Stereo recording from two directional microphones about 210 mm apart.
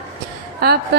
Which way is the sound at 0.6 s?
50° right (ahead or behind).